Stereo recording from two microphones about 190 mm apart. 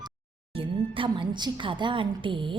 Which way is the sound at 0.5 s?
25° right (ahead or behind).